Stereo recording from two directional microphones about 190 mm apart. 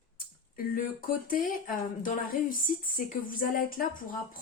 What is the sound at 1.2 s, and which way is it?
Speech, 45° left (ahead or behind).